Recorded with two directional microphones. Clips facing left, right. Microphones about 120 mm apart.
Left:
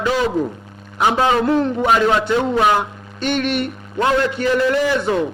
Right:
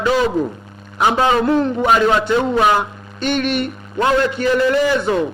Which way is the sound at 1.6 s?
15° right (ahead or behind).